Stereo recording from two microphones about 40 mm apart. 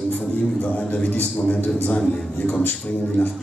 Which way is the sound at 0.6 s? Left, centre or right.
Left.